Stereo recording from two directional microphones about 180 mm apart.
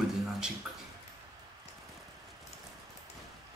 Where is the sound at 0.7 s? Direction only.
5° right (ahead or behind).